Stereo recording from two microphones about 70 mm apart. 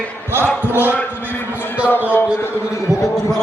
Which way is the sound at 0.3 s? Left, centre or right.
Right.